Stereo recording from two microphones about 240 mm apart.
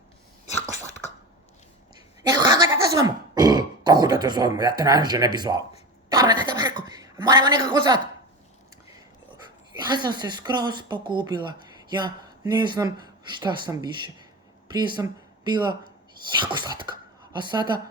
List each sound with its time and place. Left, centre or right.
2.2 s a sound: centre
2.9 s a woman's voice: centre
9.7 s speech: centre